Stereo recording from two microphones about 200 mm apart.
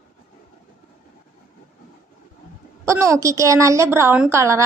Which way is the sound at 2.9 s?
15° right (ahead or behind).